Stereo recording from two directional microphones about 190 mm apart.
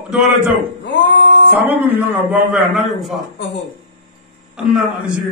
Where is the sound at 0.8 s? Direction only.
70° left (ahead or behind).